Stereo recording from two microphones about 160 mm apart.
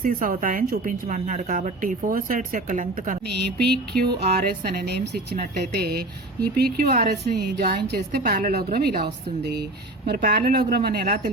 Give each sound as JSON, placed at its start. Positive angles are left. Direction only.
{"t": 0.0, "sound": "a woman's voice", "side_deg": -60}
{"t": 3.2, "sound": "a sound", "side_deg": -90}
{"t": 4.3, "sound": "a woman's voice", "side_deg": -75}
{"t": 6.9, "sound": "a woman's voice", "side_deg": -65}
{"t": 10.2, "sound": "a woman's voice", "side_deg": -70}